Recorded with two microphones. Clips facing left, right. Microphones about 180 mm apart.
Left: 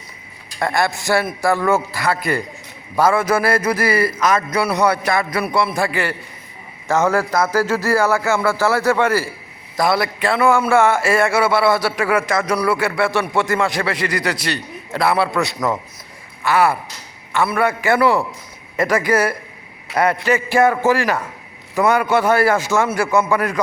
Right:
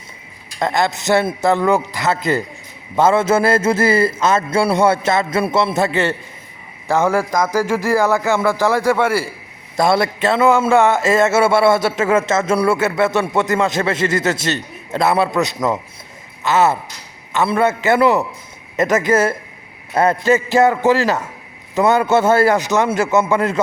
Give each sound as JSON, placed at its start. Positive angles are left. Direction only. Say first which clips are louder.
{"t": 0.6, "sound": "a man's voice", "louder": "right 1 dB", "side_deg": -20}
{"t": 9.7, "sound": "a man's voice", "louder": "right 3 dB", "side_deg": -25}